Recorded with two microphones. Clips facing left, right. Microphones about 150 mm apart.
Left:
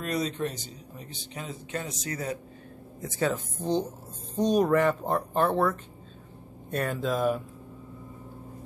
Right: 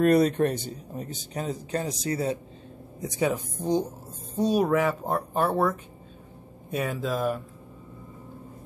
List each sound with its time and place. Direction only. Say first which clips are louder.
0.0 s speech: right 10 dB; 55° right (ahead or behind); by 2.3 s 30° right (ahead or behind)
3.0 s speech: right 2 dB; 15° right (ahead or behind); by 7.4 s centre (ahead or behind)